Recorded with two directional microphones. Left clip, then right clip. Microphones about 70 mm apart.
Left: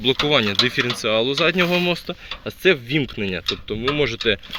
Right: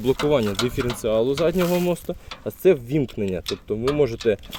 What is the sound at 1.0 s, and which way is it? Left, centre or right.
Speech, right.